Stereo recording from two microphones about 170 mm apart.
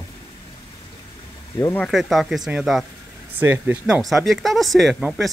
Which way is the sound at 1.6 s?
15° left (ahead or behind).